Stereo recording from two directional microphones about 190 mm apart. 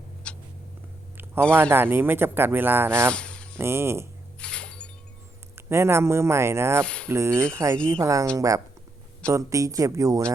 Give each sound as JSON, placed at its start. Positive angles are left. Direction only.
{"t": 0.2, "sound": "cat", "side_deg": 5}
{"t": 1.7, "sound": "speech", "side_deg": -10}
{"t": 3.1, "sound": "a sound", "side_deg": 5}
{"t": 3.6, "sound": "speech", "side_deg": -15}
{"t": 4.4, "sound": "a sound", "side_deg": 5}
{"t": 5.5, "sound": "speech", "side_deg": -15}
{"t": 6.8, "sound": "speech", "side_deg": 5}
{"t": 7.1, "sound": "speech", "side_deg": -15}